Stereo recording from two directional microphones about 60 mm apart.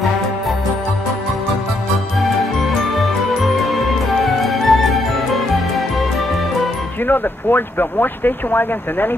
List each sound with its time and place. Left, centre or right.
2.7 s jingle: centre
3.7 s music: centre
7.1 s speech: left